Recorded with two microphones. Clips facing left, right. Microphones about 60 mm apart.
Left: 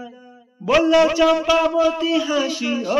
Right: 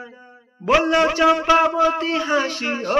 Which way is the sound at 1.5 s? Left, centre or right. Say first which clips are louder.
Right 1 dB; right.